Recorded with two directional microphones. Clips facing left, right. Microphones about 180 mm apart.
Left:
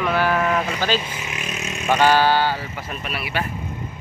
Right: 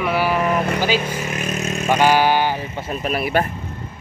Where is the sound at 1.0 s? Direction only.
45° right (ahead or behind).